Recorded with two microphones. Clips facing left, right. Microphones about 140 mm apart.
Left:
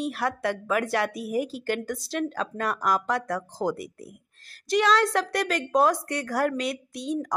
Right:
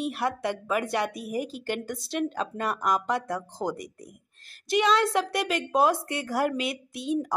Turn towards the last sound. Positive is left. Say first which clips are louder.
# right 1 dB
turn(degrees=-5)  # may be behind; listen again after turning